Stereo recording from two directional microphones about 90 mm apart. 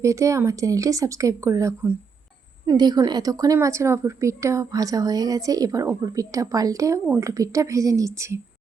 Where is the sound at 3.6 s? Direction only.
35° right (ahead or behind).